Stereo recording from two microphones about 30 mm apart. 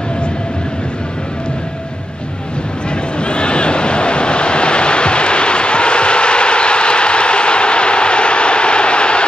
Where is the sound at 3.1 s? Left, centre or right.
Left.